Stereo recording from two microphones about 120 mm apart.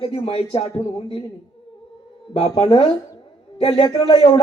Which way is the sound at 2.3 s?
50° left (ahead or behind).